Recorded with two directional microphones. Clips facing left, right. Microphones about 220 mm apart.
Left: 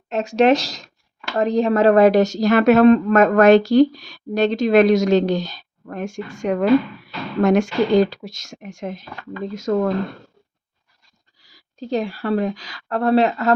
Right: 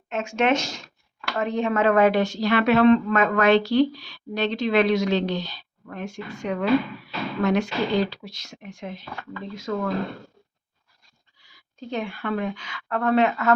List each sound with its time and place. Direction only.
0.1 s a woman's voice: 35° left (ahead or behind)
11.3 s a woman's voice: 40° left (ahead or behind)